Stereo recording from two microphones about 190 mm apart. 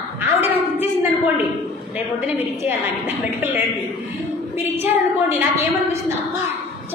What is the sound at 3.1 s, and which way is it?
Speech, 10° right (ahead or behind).